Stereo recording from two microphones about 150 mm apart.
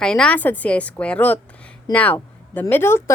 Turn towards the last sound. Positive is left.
turn(degrees=15)  # may be behind; listen again after turning